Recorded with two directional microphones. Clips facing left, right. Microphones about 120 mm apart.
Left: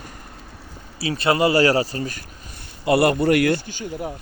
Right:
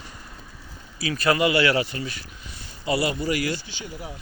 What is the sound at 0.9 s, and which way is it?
Speech, 30° left (ahead or behind).